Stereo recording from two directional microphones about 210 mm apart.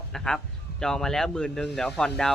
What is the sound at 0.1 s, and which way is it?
A man's voice, 5° left (ahead or behind).